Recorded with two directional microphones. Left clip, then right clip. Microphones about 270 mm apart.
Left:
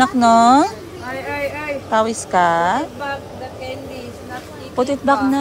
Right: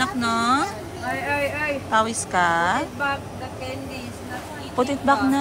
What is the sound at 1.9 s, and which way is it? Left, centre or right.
Speech, centre.